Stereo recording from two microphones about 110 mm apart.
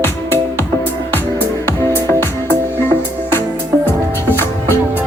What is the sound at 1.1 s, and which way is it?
Music, 20° left (ahead or behind).